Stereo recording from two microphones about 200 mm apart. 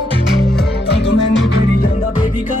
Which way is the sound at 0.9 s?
60° left (ahead or behind).